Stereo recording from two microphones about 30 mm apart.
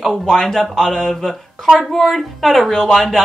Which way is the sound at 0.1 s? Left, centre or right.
Centre.